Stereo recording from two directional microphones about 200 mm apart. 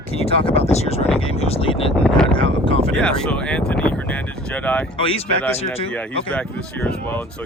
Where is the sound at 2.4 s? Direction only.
25° left (ahead or behind).